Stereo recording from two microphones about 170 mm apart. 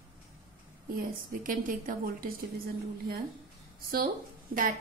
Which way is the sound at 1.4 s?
55° right (ahead or behind).